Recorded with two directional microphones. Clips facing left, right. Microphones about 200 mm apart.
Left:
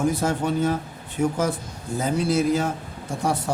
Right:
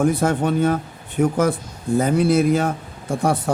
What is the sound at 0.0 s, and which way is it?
Speech, 55° right (ahead or behind).